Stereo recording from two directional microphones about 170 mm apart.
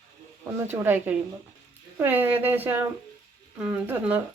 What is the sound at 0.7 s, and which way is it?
Speech, 15° right (ahead or behind).